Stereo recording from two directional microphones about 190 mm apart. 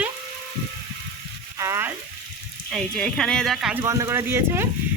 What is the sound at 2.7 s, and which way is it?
Speech, 5° left (ahead or behind).